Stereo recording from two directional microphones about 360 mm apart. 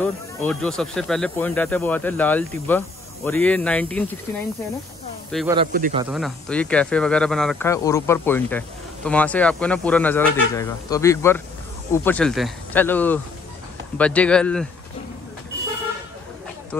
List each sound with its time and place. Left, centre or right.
0.0 s speech: centre
5.3 s speech: centre
5.7 s speech: right
6.0 s speech: centre